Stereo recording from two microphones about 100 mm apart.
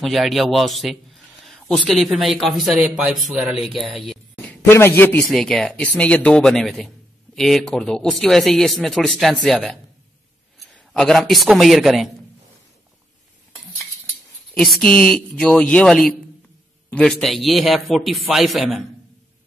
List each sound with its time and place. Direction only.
0.0 s speech: centre (ahead or behind)
3.3 s speech: 15° right (ahead or behind)
3.8 s speech: centre (ahead or behind)
4.6 s a man's voice: 25° left (ahead or behind)
5.2 s speech: 5° left (ahead or behind)
14.5 s speech: 5° left (ahead or behind)